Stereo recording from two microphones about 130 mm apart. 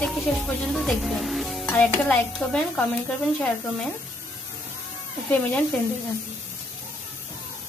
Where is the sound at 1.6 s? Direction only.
15° left (ahead or behind).